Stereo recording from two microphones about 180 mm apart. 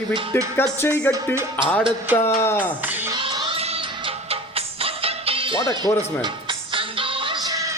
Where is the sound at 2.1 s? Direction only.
15° left (ahead or behind).